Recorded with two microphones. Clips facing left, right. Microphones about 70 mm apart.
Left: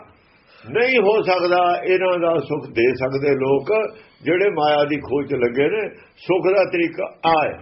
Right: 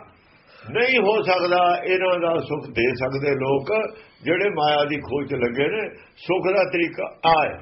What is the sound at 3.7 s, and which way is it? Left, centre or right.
Speech, left.